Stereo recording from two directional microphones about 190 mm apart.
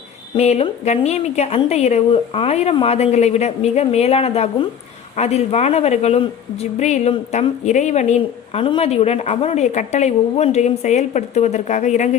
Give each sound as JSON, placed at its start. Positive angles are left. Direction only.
{"t": 0.3, "sound": "a woman's voice", "side_deg": 35}